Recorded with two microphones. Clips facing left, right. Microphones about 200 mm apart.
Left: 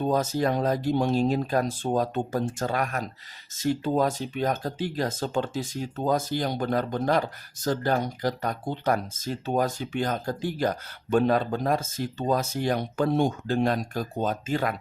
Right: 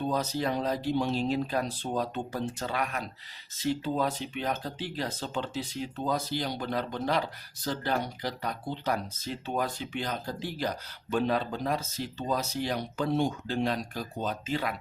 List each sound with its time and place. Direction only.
0.0 s speech: 45° left (ahead or behind)